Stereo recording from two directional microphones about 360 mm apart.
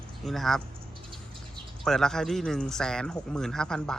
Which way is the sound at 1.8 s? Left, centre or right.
Centre.